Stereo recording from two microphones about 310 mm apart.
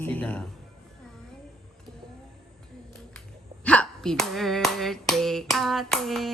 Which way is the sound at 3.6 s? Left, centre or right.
Centre.